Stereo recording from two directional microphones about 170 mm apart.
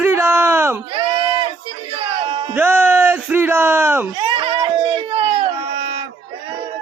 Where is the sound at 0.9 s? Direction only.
30° right (ahead or behind).